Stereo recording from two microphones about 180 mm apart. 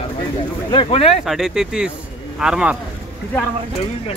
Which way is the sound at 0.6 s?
30° left (ahead or behind).